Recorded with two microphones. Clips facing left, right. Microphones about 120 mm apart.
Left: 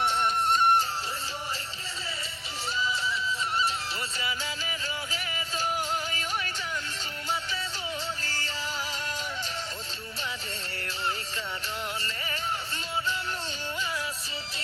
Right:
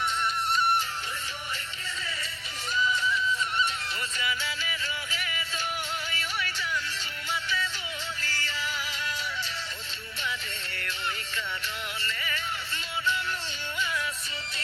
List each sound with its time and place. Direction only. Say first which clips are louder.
0.0 s music: left 3 dB; 50° left (ahead or behind)
2.7 s music: right 4 dB; 30° left (ahead or behind)
4.2 s music: right 3 dB; 35° left (ahead or behind)
8.2 s music: right 1 dB; 40° left (ahead or behind)
12.0 s music: right 1 dB; 35° left (ahead or behind)